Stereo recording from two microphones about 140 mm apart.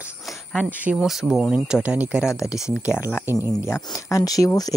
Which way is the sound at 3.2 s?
15° right (ahead or behind).